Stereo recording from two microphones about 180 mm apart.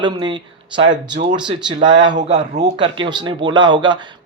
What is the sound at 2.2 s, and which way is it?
Speech, 40° right (ahead or behind).